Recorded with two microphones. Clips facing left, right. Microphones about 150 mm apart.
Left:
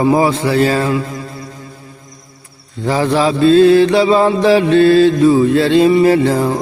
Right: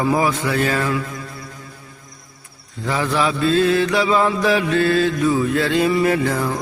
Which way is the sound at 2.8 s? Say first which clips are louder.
Left 6 dB; 30° left (ahead or behind).